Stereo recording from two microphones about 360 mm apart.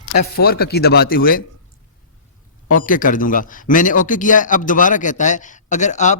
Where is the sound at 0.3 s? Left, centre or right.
Left.